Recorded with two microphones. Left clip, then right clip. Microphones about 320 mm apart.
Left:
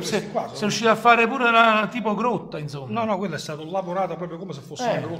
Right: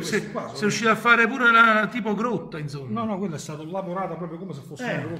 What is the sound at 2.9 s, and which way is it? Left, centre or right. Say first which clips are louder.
A man's voice: left 5 dB; left.